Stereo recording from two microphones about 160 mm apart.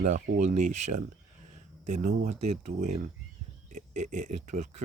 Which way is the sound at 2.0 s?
50° right (ahead or behind).